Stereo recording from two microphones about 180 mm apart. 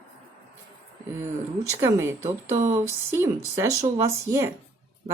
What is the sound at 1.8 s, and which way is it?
Speech, 15° right (ahead or behind).